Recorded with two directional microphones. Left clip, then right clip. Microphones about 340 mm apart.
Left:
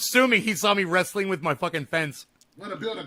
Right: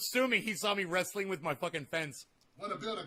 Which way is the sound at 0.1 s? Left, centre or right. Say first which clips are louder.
Left 11 dB; centre.